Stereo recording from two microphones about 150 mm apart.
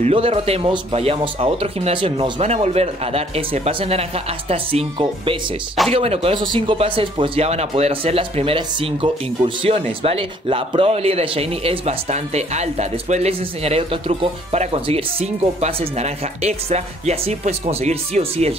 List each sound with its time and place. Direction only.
0.0 s speech: 40° right (ahead or behind)
2.4 s speech: 45° right (ahead or behind)